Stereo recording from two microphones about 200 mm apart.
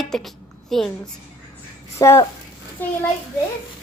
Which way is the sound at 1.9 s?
15° left (ahead or behind).